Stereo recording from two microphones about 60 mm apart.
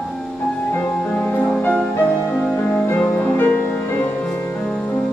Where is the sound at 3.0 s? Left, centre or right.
Left.